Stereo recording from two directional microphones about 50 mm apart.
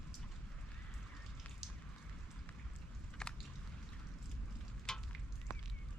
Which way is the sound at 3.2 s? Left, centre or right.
Centre.